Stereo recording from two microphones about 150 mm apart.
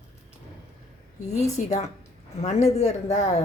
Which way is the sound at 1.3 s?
50° left (ahead or behind).